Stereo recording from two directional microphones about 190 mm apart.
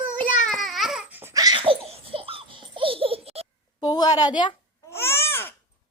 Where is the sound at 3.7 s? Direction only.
20° left (ahead or behind).